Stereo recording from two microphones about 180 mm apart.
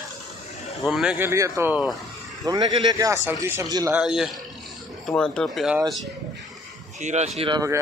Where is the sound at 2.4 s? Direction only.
25° right (ahead or behind).